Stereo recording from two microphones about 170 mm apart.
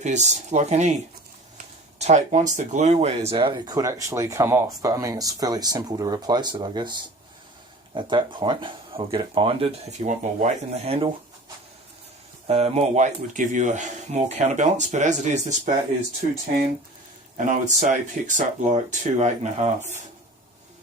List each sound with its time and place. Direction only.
0.0 s speech: 45° right (ahead or behind); by 6.9 s 25° right (ahead or behind)
7.9 s speech: 30° right (ahead or behind)
12.5 s speech: 35° right (ahead or behind)
17.3 s speech: 45° right (ahead or behind)